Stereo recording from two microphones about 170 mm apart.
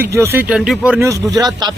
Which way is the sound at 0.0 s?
15° right (ahead or behind).